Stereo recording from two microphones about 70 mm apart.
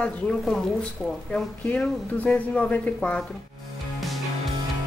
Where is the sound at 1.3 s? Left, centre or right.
Centre.